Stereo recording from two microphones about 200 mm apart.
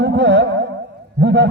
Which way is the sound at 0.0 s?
60° right (ahead or behind).